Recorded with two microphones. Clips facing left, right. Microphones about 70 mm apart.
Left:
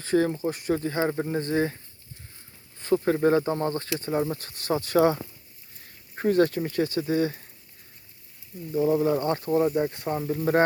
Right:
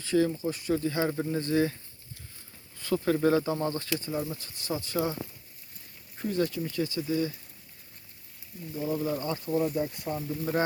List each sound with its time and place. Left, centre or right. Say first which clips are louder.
0.0 s speech: left 3 dB; left
6.1 s speech: left 7 dB; left
8.9 s speech: left 6 dB; left